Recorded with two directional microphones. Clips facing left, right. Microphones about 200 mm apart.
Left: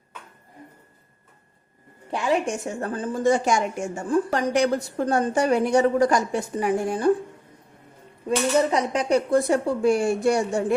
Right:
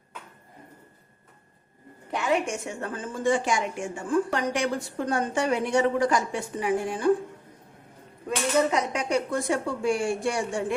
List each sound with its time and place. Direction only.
2.1 s a woman's voice: 35° left (ahead or behind)
8.7 s a woman's voice: 35° left (ahead or behind)